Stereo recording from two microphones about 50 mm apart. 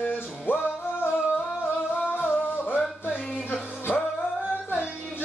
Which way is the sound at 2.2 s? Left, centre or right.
Left.